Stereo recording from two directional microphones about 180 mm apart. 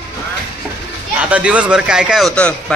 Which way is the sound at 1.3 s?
5° right (ahead or behind).